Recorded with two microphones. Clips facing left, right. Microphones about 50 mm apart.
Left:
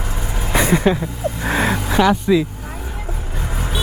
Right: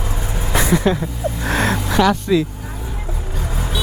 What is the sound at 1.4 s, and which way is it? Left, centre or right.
Speech, centre.